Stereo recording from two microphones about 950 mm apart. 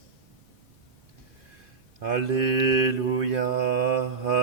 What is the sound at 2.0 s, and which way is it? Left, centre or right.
Mantra, right.